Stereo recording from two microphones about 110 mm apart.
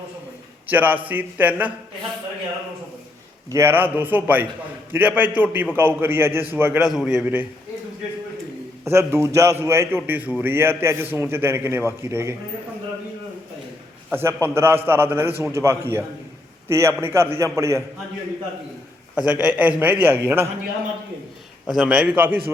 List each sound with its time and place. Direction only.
0.7 s a man's voice: 15° right (ahead or behind)
3.5 s a man's voice: 20° right (ahead or behind)
6.9 s a man's voice: 5° right (ahead or behind)
8.8 s a man's voice: 25° right (ahead or behind)
14.1 s a man's voice: 20° right (ahead or behind)
19.1 s a man's voice: 10° right (ahead or behind)
21.7 s a man's voice: 5° right (ahead or behind)